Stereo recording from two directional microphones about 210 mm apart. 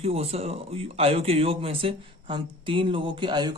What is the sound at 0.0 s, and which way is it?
Speech, 30° right (ahead or behind).